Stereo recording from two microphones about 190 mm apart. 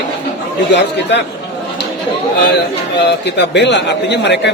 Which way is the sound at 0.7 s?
65° left (ahead or behind).